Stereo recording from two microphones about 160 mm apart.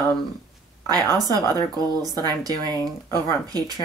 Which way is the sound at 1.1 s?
25° right (ahead or behind).